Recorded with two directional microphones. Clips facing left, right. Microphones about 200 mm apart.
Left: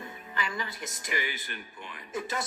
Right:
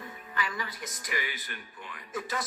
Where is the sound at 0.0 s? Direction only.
25° left (ahead or behind).